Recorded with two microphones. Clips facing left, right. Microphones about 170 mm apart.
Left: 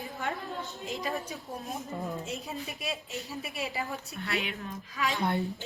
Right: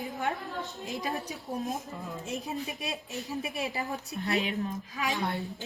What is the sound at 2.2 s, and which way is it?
A woman's voice, 20° right (ahead or behind).